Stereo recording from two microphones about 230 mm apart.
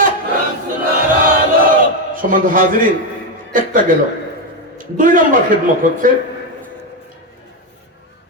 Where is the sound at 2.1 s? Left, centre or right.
Right.